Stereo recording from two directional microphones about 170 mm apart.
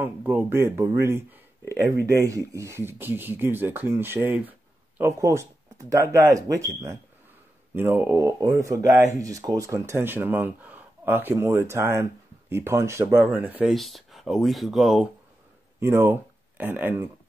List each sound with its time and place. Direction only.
0.0 s speech: 10° right (ahead or behind)
7.7 s speech: 15° right (ahead or behind)
15.8 s speech: 15° right (ahead or behind)